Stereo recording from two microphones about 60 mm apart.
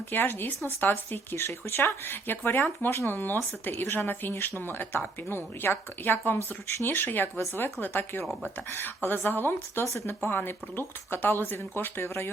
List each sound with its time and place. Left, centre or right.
0.1 s speech: left
1.5 s speech: left
1.8 s speech: left
3.7 s speech: left
3.9 s speech: left
9.8 s speech: left